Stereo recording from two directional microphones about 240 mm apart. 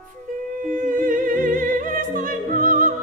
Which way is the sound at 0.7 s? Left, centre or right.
Right.